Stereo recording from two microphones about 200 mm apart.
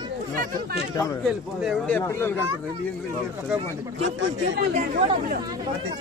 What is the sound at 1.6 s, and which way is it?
Speech, 5° left (ahead or behind).